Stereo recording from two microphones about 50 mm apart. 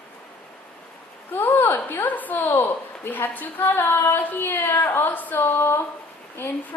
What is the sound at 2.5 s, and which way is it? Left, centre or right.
A woman's voice, left.